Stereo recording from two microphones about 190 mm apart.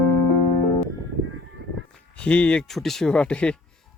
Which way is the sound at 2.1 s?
5° left (ahead or behind).